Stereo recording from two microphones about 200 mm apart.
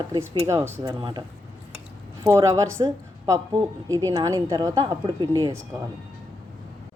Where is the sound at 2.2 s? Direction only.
15° right (ahead or behind).